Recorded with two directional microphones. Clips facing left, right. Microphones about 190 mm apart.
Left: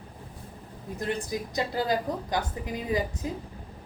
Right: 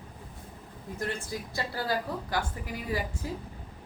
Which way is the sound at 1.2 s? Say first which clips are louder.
Left 5 dB; 20° left (ahead or behind).